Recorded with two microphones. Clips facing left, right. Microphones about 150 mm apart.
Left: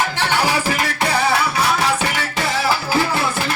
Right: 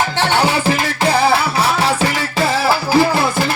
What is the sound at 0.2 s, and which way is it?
Music, 30° right (ahead or behind).